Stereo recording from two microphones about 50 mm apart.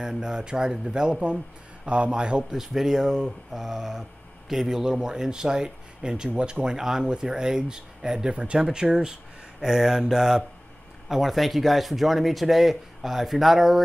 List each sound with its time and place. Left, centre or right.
0.0 s speech: centre
2.6 s speech: centre
8.6 s speech: centre